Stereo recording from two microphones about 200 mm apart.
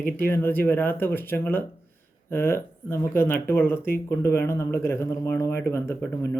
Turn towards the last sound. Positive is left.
turn(degrees=15)  # may be behind; listen again after turning